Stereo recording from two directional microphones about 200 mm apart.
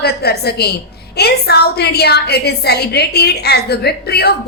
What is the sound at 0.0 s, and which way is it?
A woman's voice, 55° left (ahead or behind).